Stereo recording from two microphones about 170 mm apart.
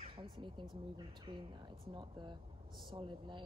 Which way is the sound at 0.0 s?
30° right (ahead or behind).